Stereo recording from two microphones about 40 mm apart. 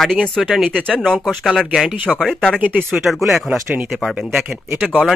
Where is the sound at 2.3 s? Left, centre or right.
Centre.